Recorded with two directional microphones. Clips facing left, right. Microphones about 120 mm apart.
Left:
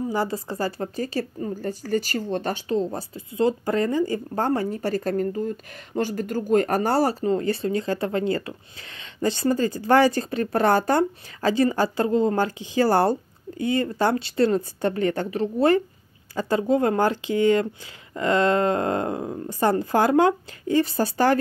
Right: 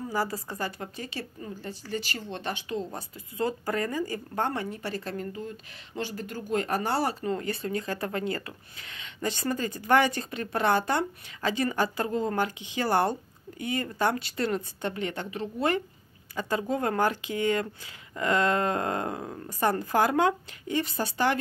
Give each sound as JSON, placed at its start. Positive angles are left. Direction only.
{"t": 0.1, "sound": "a woman's voice", "side_deg": 25}